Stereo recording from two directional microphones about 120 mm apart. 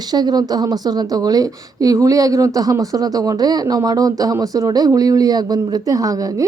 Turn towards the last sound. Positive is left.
turn(degrees=-30)  # may be behind; listen again after turning